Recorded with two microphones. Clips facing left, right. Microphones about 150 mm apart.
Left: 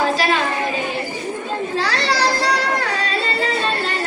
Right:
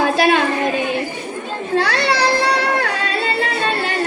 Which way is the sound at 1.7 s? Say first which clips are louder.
Right 6 dB; 60° right (ahead or behind).